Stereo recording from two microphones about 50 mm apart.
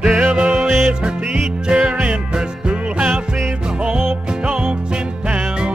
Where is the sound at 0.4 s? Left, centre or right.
Centre.